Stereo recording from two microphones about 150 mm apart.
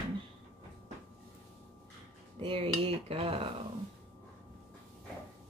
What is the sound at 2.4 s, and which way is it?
Speech, 40° right (ahead or behind).